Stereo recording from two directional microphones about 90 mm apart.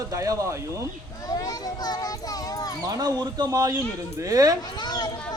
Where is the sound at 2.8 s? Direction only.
45° right (ahead or behind).